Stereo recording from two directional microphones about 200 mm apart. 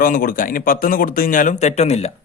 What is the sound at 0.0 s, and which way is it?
A man's voice, 45° left (ahead or behind).